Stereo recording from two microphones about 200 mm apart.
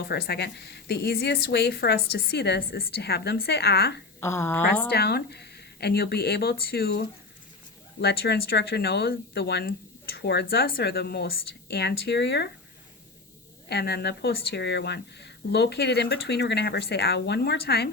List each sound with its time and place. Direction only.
0.0 s speech: 50° left (ahead or behind)
4.2 s a woman's voice: 15° left (ahead or behind)
4.9 s speech: 55° left (ahead or behind)
13.7 s speech: 55° left (ahead or behind)